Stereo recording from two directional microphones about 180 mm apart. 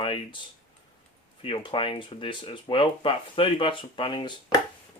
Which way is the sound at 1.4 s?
30° left (ahead or behind).